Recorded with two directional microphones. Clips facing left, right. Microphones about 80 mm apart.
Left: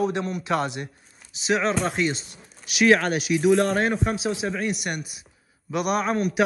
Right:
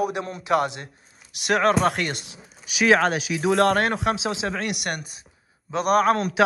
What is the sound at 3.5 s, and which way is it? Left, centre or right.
A man's voice, right.